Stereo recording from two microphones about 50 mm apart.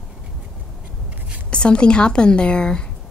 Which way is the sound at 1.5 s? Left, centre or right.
Left.